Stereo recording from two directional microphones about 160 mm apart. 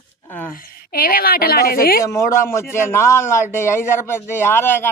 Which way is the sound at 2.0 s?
20° left (ahead or behind).